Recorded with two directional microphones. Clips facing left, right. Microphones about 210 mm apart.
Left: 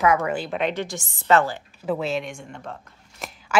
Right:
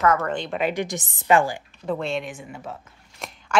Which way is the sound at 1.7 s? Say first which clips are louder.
Left 2 dB; 5° left (ahead or behind).